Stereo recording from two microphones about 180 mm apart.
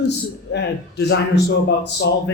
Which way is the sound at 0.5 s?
70° left (ahead or behind).